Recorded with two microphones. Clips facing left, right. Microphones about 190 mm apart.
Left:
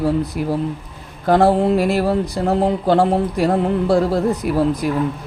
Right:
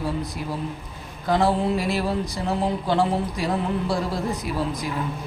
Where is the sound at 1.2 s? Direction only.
55° left (ahead or behind).